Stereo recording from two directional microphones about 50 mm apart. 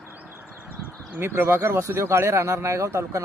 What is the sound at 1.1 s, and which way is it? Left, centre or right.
Speech, right.